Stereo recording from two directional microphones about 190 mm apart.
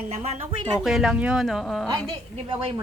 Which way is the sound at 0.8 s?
Centre (ahead or behind).